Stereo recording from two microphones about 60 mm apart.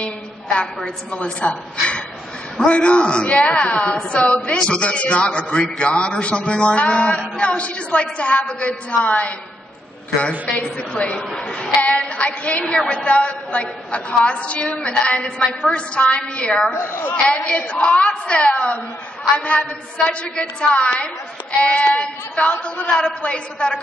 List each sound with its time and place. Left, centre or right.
0.6 s a man's voice: centre
10.8 s a man's voice: centre
16.7 s a woman's voice: left
17.1 s a woman's voice: centre